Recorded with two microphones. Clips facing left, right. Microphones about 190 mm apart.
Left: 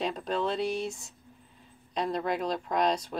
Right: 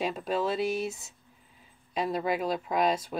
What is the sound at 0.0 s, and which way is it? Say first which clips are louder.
Speech: right 1 dB; 5° right (ahead or behind).